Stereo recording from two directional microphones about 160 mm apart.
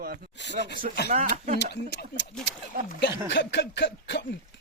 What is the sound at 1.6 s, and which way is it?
Speech, 90° left.